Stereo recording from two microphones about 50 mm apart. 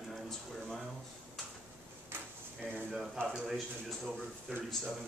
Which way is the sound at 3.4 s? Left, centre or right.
Centre.